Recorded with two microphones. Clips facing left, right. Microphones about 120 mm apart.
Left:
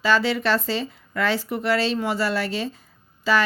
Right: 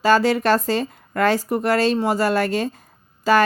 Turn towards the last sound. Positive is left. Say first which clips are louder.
# right 5 dB
turn(degrees=-50)  # may be behind; listen again after turning